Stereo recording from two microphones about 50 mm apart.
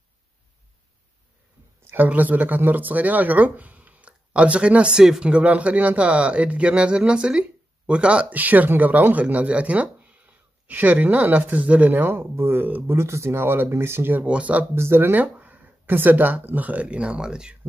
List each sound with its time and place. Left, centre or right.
2.0 s speech: right
8.3 s speech: right
12.8 s speech: right
14.2 s speech: right
14.8 s speech: right
15.3 s speech: right; by 17.6 s centre